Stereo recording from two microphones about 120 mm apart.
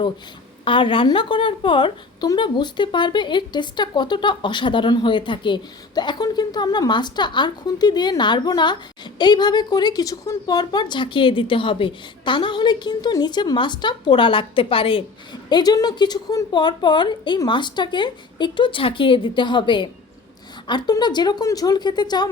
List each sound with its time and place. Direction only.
0.6 s a woman's voice: 45° left (ahead or behind)
15.4 s a woman's voice: 35° left (ahead or behind)